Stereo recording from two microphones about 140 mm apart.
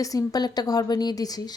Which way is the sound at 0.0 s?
25° left (ahead or behind).